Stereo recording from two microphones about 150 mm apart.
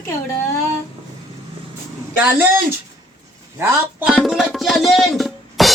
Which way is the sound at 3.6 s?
15° right (ahead or behind).